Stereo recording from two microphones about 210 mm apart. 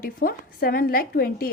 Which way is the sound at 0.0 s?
45° left (ahead or behind).